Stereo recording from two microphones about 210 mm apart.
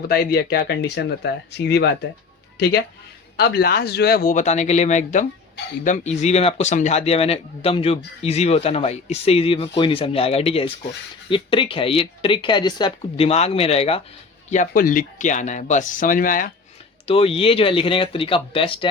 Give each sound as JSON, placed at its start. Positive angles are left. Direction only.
{"t": 0.1, "sound": "speech", "side_deg": 45}
{"t": 14.5, "sound": "speech", "side_deg": 40}
{"t": 17.1, "sound": "speech", "side_deg": 25}